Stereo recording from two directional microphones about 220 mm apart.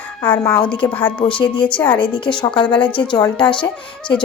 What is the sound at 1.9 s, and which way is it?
A woman's voice, 20° left (ahead or behind).